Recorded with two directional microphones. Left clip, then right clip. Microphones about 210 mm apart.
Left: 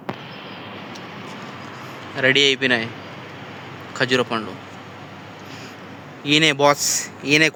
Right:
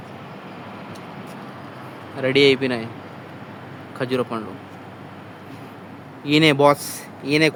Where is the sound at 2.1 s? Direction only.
Centre (ahead or behind).